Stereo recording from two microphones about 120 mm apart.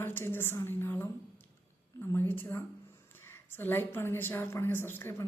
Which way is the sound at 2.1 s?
15° left (ahead or behind).